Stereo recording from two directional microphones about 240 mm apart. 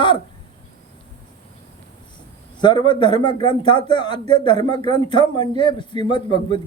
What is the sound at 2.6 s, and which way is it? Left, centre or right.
Speech, centre.